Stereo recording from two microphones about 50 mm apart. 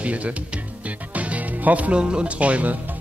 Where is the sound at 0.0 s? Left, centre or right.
Right.